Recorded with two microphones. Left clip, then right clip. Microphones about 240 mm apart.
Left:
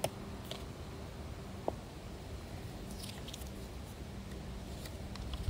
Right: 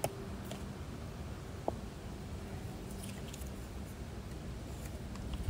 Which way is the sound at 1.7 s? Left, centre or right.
Centre.